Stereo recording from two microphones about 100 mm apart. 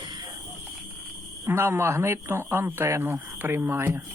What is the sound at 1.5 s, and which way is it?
Speech, 25° right (ahead or behind).